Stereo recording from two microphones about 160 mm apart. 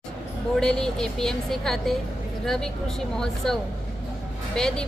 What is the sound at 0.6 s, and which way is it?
Music, 5° left (ahead or behind).